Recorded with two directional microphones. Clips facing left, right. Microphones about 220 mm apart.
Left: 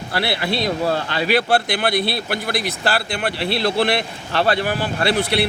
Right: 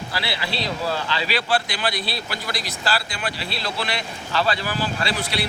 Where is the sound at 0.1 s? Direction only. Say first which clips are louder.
Left 8 dB; 55° left (ahead or behind).